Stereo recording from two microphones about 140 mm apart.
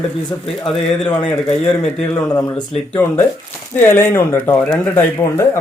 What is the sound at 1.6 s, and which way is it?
Speech, 5° left (ahead or behind).